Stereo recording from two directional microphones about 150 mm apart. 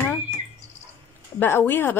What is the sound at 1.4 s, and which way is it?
Speech, 15° left (ahead or behind).